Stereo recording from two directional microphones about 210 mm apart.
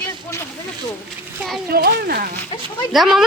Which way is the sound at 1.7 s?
45° right (ahead or behind).